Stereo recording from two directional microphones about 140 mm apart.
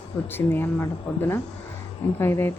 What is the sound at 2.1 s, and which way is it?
Speech, 20° left (ahead or behind).